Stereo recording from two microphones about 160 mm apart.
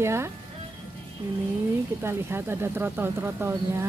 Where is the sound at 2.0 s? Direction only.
15° right (ahead or behind).